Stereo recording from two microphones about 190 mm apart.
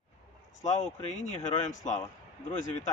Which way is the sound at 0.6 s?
40° left (ahead or behind).